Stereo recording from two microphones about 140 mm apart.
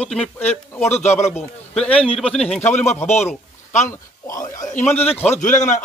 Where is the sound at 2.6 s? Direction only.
55° left (ahead or behind).